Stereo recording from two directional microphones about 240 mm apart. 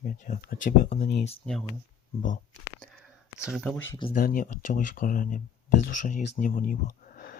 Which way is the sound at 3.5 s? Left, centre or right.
Centre.